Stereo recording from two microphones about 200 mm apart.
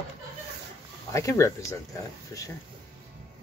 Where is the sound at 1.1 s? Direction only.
15° left (ahead or behind).